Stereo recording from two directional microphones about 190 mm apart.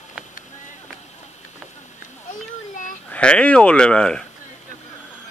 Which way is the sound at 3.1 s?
5° left (ahead or behind).